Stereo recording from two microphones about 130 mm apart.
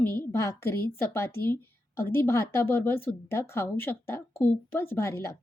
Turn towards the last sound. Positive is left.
turn(degrees=20)  # may be behind; listen again after turning